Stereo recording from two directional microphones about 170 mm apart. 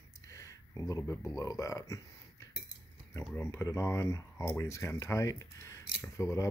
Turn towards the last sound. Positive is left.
turn(degrees=20)  # may be behind; listen again after turning